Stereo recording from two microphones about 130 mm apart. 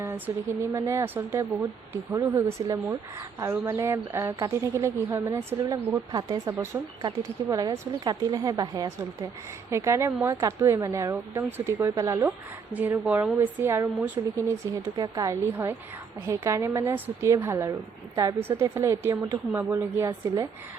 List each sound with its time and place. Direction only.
0.0 s a woman's voice: 20° right (ahead or behind)
2.6 s a woman's voice: 25° right (ahead or behind)
14.9 s a woman's voice: 30° right (ahead or behind)